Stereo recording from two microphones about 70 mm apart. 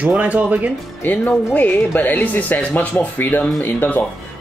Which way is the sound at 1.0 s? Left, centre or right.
Left.